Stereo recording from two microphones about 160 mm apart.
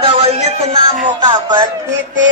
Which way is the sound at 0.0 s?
35° right (ahead or behind).